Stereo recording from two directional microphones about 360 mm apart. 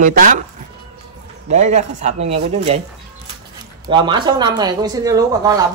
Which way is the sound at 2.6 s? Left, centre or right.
Centre.